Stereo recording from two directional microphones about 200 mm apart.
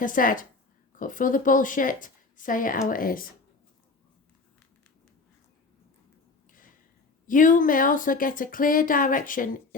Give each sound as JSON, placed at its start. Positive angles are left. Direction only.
{"t": 0.0, "sound": "a woman's voice", "side_deg": 45}
{"t": 7.3, "sound": "speech", "side_deg": 40}